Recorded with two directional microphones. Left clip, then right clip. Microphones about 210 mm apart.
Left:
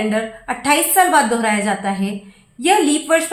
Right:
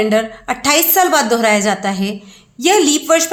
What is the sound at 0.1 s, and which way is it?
A woman's voice, 45° right (ahead or behind).